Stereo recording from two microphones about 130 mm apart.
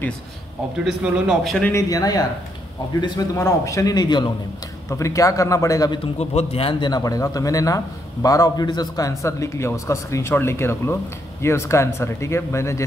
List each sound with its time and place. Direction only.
0.8 s speech: 5° right (ahead or behind)
1.7 s speech: 25° left (ahead or behind)
6.1 s speech: 55° left (ahead or behind); by 12.8 s 20° left (ahead or behind)